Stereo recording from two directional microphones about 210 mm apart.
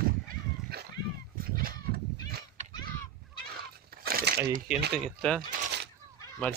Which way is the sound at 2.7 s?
20° left (ahead or behind).